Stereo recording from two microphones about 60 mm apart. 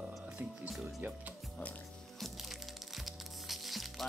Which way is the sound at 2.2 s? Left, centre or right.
Centre.